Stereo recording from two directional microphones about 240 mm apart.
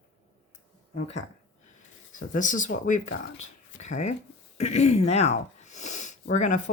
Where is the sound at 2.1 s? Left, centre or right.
Left.